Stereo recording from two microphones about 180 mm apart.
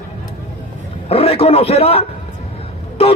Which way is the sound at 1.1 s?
35° left (ahead or behind).